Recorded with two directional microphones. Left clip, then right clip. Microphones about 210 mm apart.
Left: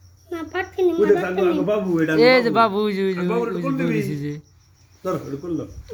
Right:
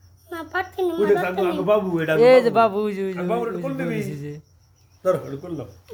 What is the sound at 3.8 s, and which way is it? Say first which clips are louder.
Speech: left 4 dB; 30° right (ahead or behind).